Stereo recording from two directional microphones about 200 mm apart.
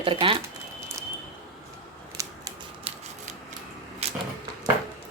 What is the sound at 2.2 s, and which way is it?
Scissors, 15° right (ahead or behind).